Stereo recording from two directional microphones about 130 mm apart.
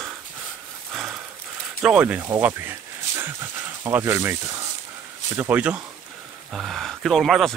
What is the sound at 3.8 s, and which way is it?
Speech, 20° right (ahead or behind).